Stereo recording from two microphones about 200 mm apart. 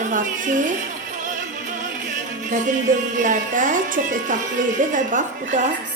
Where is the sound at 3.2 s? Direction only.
40° right (ahead or behind).